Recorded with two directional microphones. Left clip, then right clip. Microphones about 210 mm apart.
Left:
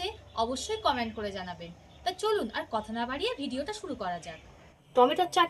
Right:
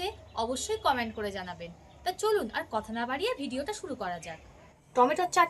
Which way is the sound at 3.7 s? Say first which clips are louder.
Even; centre (ahead or behind).